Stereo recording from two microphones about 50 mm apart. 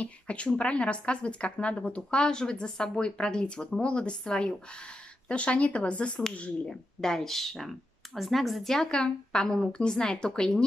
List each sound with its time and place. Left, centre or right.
0.0 s a woman's voice: left
6.7 s speech: centre